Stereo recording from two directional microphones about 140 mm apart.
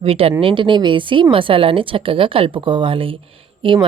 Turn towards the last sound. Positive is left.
turn(degrees=-40)  # may be behind; listen again after turning